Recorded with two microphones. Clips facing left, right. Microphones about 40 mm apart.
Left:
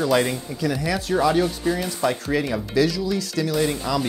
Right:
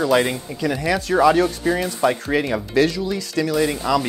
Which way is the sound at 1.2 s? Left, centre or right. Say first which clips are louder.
Right 5 dB; right.